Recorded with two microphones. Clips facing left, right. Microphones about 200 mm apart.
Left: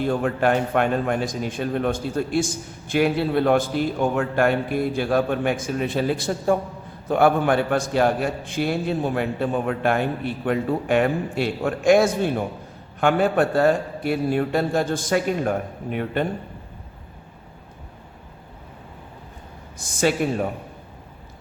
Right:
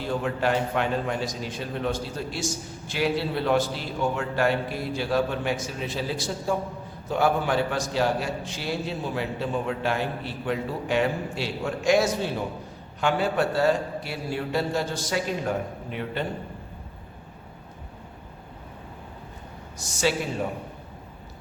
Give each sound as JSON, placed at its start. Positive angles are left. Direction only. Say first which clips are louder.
{"t": 0.0, "sound": "a man's voice", "louder": "left 5 dB", "side_deg": 55}
{"t": 19.8, "sound": "a man's voice", "louder": "left 4 dB", "side_deg": 55}